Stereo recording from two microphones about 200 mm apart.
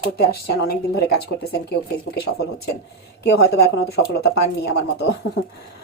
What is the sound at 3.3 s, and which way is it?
Speech, 55° left (ahead or behind).